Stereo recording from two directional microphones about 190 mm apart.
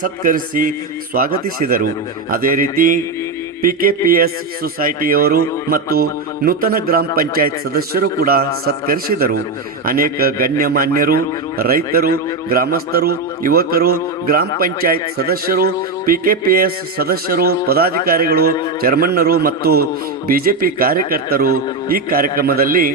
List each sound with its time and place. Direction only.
0.0 s a man's voice: 45° right (ahead or behind)